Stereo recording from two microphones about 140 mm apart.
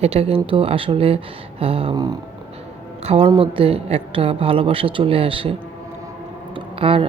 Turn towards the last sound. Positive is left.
turn(degrees=-40)  # may be behind; listen again after turning